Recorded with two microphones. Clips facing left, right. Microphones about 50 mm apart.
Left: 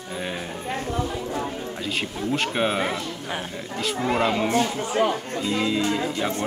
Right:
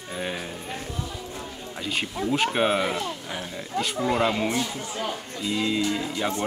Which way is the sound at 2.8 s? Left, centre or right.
Left.